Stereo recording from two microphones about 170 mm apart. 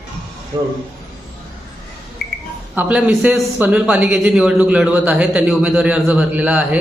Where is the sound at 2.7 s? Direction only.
10° right (ahead or behind).